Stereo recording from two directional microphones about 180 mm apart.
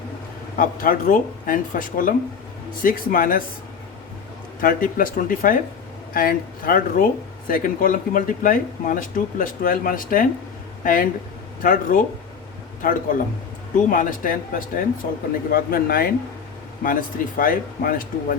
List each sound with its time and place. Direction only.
0.5 s speech: 50° left (ahead or behind)
4.6 s speech: 50° left (ahead or behind)